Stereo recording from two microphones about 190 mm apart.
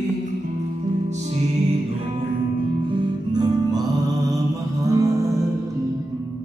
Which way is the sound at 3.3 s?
20° right (ahead or behind).